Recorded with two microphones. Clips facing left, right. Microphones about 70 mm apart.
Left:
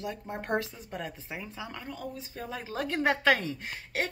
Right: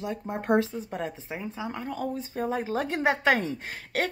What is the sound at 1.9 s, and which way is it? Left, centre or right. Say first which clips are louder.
Speech: right 8 dB; right.